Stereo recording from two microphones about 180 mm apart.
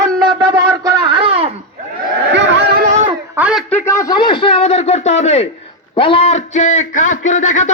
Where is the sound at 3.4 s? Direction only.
5° right (ahead or behind).